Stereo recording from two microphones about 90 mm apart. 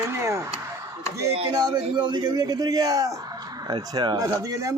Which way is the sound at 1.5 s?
45° right (ahead or behind).